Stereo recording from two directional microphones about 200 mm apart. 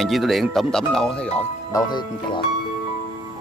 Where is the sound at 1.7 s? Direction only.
20° left (ahead or behind).